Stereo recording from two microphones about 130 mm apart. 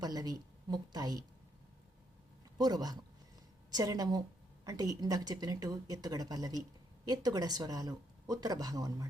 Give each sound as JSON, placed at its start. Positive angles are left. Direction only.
{"t": 0.0, "sound": "a woman's voice", "side_deg": -30}
{"t": 2.6, "sound": "a woman's voice", "side_deg": -30}